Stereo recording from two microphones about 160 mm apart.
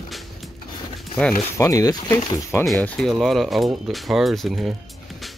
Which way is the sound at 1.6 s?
20° left (ahead or behind).